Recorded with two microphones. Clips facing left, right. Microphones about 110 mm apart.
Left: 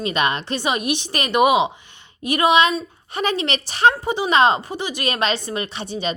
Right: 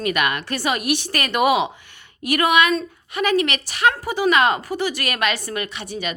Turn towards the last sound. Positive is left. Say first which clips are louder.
# left 3 dB
turn(degrees=30)  # may be behind; listen again after turning